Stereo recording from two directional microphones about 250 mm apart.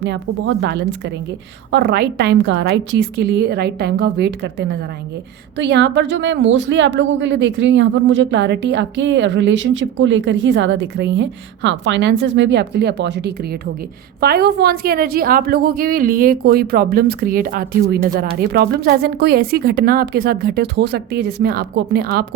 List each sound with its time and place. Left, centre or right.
0.0 s a woman's voice: right